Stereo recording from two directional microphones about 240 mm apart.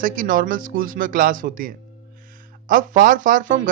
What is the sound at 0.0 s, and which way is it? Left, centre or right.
Speech, right.